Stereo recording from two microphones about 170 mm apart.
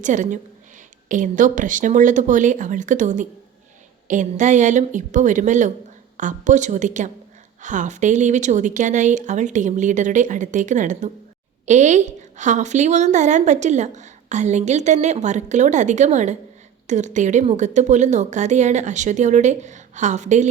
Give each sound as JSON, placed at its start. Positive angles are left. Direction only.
{"t": 0.0, "sound": "a woman's voice", "side_deg": -50}